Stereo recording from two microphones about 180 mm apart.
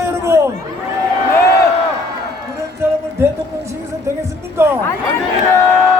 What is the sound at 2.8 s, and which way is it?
A man's voice, 15° right (ahead or behind).